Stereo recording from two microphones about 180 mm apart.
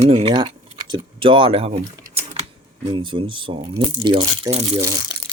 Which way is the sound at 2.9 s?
30° right (ahead or behind).